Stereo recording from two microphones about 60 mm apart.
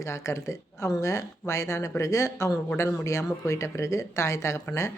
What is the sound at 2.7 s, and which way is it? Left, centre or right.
Speech, left.